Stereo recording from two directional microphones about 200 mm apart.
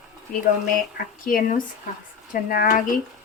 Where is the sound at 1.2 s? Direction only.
45° left (ahead or behind).